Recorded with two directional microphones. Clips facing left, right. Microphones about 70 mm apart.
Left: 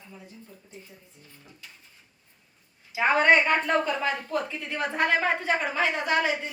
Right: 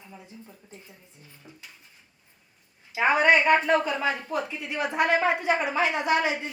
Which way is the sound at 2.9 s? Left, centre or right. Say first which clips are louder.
Even; centre.